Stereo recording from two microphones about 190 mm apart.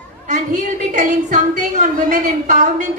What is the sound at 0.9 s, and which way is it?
A woman's voice, 40° right (ahead or behind).